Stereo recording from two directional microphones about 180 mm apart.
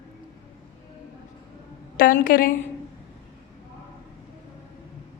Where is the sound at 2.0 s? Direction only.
50° left (ahead or behind).